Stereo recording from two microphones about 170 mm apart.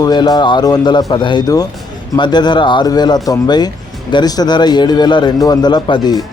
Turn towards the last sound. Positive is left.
turn(degrees=25)  # may be behind; listen again after turning